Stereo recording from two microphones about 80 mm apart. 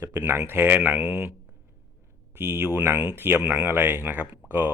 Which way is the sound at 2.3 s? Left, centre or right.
Right.